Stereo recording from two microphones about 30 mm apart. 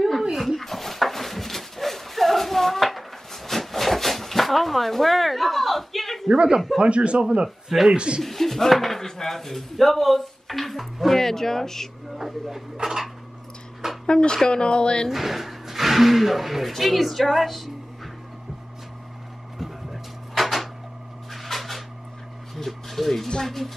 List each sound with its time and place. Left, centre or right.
0.3 s dog: centre
6.2 s a woman's voice: right
7.4 s speech: centre
7.9 s a man's voice: right
8.2 s speech: centre
11.1 s speech: centre
12.2 s speech: centre
14.0 s speech: left
15.0 s speech: centre
19.6 s a sound: centre
21.3 s cupboard open or close: centre
22.7 s a sound: centre
23.4 s speech: centre